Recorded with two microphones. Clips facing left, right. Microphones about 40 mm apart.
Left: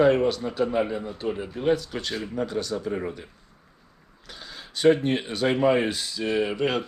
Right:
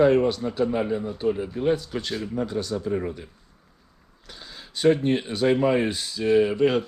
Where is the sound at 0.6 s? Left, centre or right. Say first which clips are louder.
Even; left.